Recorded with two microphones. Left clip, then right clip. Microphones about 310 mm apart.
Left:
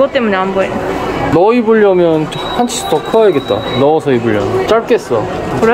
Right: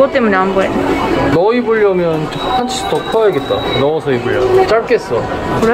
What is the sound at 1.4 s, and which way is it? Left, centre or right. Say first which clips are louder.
Speech: left 5 dB; left.